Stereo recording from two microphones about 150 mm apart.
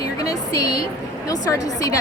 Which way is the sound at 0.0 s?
25° left (ahead or behind).